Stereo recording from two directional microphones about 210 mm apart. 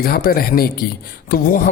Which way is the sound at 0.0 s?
45° left (ahead or behind).